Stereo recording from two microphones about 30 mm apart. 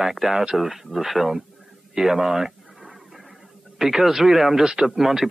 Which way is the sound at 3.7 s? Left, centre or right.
Centre.